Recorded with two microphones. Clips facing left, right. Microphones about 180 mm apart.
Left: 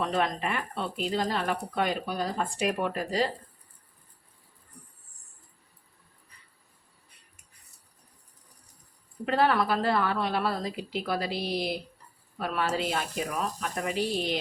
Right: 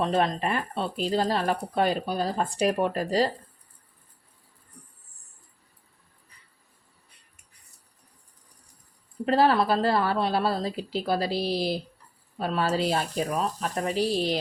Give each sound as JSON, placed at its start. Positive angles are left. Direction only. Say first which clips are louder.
{"t": 0.0, "sound": "speech", "louder": "right 3 dB", "side_deg": -35}
{"t": 9.2, "sound": "speech", "louder": "right 3 dB", "side_deg": -30}